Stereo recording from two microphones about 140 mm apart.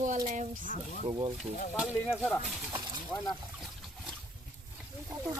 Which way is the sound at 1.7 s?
5° right (ahead or behind).